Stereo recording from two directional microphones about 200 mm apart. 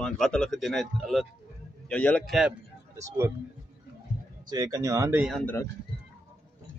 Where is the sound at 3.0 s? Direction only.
10° right (ahead or behind).